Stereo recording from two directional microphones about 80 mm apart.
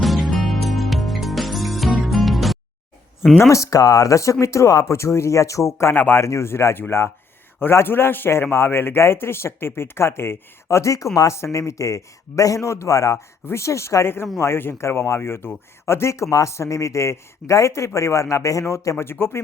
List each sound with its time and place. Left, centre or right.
0.0 s music: centre
3.5 s a man's voice: left
6.0 s speech: left
6.2 s a man's voice: left